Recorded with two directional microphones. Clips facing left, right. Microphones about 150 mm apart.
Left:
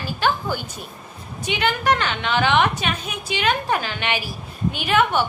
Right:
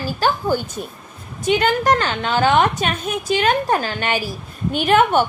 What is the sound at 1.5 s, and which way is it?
A woman's voice, 45° right (ahead or behind).